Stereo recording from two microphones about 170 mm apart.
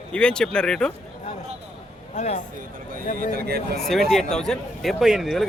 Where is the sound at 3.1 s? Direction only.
50° left (ahead or behind).